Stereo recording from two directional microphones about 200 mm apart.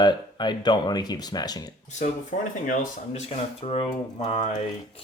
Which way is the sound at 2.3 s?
35° left (ahead or behind).